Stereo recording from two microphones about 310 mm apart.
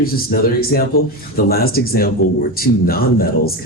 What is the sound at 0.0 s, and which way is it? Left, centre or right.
Speech, left.